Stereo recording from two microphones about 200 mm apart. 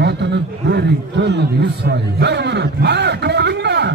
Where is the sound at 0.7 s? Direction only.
55° right (ahead or behind).